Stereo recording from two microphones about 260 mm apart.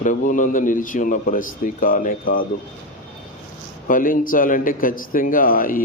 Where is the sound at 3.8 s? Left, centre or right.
Left.